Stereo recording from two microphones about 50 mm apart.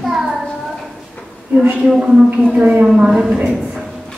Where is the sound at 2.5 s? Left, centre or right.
Right.